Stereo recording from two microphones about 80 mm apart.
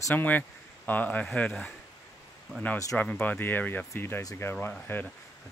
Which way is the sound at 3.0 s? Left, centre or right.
Centre.